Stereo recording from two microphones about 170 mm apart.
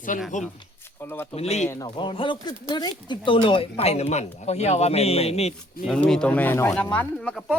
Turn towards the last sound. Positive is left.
turn(degrees=5)  # may be behind; listen again after turning